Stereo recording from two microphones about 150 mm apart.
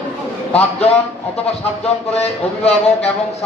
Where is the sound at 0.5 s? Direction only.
40° left (ahead or behind).